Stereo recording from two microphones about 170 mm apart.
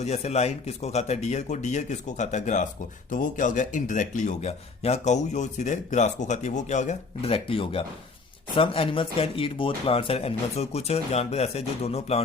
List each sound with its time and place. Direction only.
0.0 s speech: 40° left (ahead or behind)